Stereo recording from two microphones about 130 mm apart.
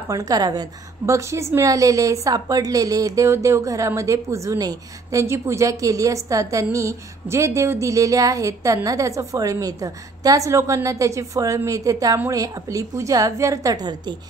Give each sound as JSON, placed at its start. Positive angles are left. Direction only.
{"t": 0.1, "sound": "a woman's voice", "side_deg": -30}